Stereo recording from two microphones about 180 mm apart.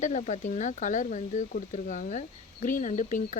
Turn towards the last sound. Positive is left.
turn(degrees=45)  # may be behind; listen again after turning